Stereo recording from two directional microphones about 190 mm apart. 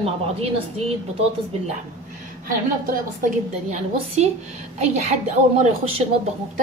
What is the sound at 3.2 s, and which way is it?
A woman's voice, 35° right (ahead or behind).